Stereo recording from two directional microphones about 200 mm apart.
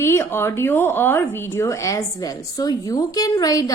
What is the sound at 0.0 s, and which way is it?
A woman's voice, 10° left (ahead or behind).